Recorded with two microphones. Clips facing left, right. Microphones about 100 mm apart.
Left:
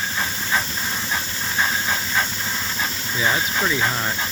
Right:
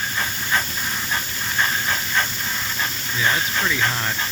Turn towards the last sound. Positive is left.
turn(degrees=10)  # may be behind; listen again after turning